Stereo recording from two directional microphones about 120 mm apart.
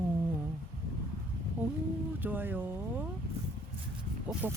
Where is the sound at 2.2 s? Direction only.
15° right (ahead or behind).